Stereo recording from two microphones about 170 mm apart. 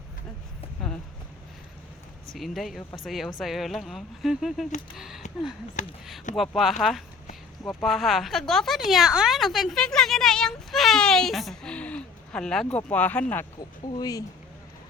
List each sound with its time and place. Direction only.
2.3 s speech: centre (ahead or behind)
5.8 s speech: 50° left (ahead or behind)
6.3 s speech: centre (ahead or behind)
13.9 s speech: 20° left (ahead or behind)